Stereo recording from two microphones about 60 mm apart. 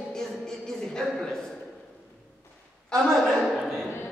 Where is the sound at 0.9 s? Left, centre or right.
Centre.